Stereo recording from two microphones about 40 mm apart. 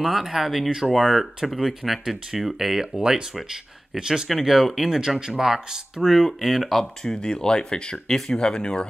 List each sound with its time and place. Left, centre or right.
0.0 s speech: centre
0.7 s speech: centre
0.9 s speech: centre
3.0 s speech: right
4.3 s speech: centre
6.7 s speech: centre